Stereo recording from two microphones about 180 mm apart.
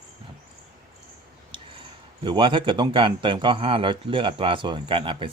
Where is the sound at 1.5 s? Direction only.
25° right (ahead or behind).